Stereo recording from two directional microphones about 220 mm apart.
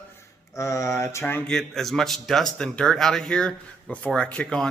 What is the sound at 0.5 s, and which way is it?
Speech, 15° left (ahead or behind).